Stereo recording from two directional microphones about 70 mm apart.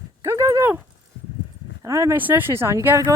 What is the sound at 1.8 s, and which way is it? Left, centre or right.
Speech, right.